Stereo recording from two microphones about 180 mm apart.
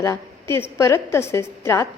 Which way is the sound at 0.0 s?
15° left (ahead or behind).